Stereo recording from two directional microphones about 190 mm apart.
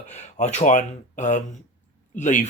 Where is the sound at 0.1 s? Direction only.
35° left (ahead or behind).